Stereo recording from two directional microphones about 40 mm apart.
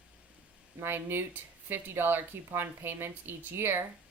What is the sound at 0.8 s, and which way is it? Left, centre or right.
Speech, right.